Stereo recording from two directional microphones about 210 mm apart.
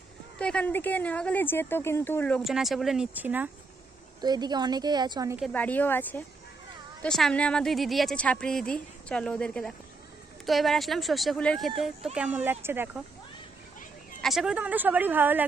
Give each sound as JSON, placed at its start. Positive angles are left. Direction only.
{"t": 0.3, "sound": "speech", "side_deg": 5}
{"t": 4.2, "sound": "a woman's voice", "side_deg": -20}
{"t": 5.4, "sound": "speech", "side_deg": 5}
{"t": 14.2, "sound": "speech", "side_deg": 0}